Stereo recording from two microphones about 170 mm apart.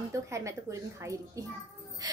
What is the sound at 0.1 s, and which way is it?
A woman's voice, 15° right (ahead or behind).